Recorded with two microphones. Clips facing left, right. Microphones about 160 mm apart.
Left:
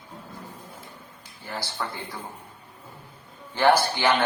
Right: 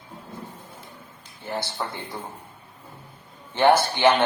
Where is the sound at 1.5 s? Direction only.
25° right (ahead or behind).